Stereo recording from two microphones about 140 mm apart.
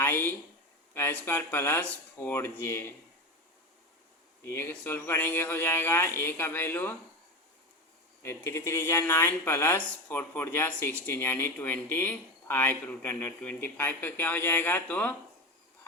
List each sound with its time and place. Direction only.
0.0 s a sound: 15° left (ahead or behind)
0.9 s speech: 15° left (ahead or behind)
4.4 s speech: 15° left (ahead or behind)
8.2 s speech: 20° left (ahead or behind)